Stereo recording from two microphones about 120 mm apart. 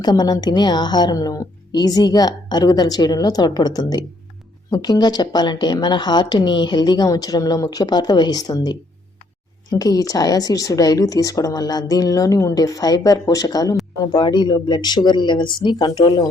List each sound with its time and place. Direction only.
0.0 s a woman's voice: 35° left (ahead or behind)
14.1 s a woman's voice: 40° left (ahead or behind)